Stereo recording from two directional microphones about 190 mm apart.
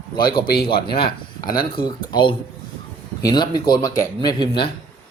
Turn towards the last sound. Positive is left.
turn(degrees=25)  # may be behind; listen again after turning